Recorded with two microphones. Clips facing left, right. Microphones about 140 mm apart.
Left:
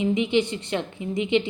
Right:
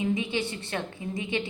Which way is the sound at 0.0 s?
20° left (ahead or behind).